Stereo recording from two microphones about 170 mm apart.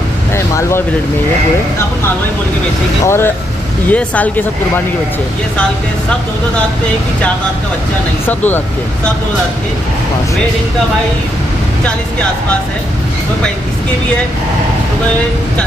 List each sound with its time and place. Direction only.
0.6 s speech: 15° left (ahead or behind)
3.1 s speech: 15° left (ahead or behind)